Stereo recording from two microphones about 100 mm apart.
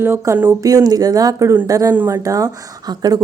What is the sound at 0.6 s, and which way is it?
Speech, 35° right (ahead or behind).